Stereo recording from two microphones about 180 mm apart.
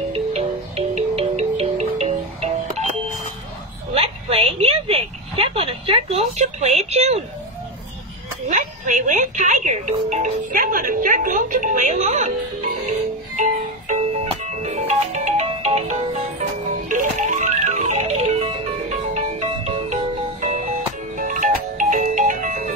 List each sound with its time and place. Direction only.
0.1 s music: 35° right (ahead or behind)
3.9 s a sound: 35° right (ahead or behind)
8.5 s speech: 45° right (ahead or behind)
14.4 s music: 40° right (ahead or behind)